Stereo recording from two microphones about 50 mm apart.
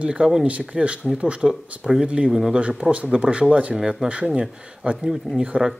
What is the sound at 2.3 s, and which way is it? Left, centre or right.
Speech, centre.